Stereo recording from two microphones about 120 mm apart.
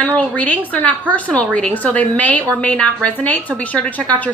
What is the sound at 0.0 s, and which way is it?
A woman's voice, 10° left (ahead or behind).